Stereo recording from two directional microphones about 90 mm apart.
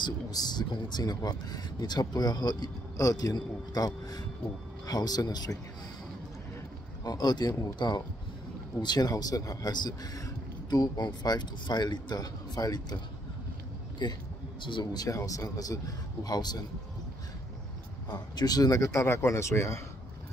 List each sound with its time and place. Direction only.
0.0 s speech: 50° left (ahead or behind)
7.1 s speech: 50° left (ahead or behind)
15.0 s speech: 40° left (ahead or behind)
18.0 s speech: 50° left (ahead or behind); by 19.8 s 30° left (ahead or behind)